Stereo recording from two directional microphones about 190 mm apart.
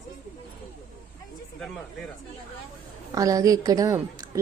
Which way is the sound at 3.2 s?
20° right (ahead or behind).